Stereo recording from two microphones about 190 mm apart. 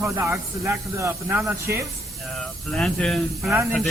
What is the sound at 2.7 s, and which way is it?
Speech, 5° left (ahead or behind).